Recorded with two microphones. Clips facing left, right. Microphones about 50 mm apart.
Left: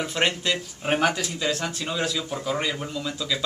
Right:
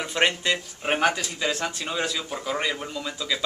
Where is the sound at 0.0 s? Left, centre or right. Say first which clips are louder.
Right 1 dB; centre.